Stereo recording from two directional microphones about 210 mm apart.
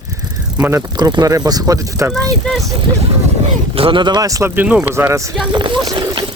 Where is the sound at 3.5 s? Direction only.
25° right (ahead or behind).